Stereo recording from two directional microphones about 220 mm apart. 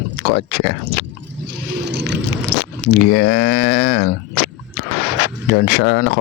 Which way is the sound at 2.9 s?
45° left (ahead or behind).